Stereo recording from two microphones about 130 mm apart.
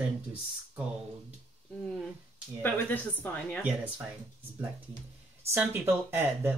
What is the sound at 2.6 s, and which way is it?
A woman's voice, 15° left (ahead or behind).